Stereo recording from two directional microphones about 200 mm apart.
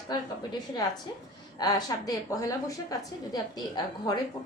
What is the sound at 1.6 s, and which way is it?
A woman's voice, 20° left (ahead or behind).